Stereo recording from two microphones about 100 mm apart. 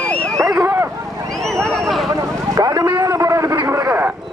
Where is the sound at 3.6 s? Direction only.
30° right (ahead or behind).